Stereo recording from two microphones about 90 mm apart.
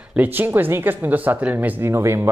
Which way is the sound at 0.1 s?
20° right (ahead or behind).